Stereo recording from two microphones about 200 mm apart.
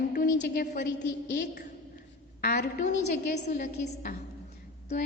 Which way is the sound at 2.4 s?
45° left (ahead or behind).